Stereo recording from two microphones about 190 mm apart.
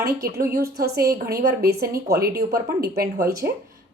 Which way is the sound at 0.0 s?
55° right (ahead or behind).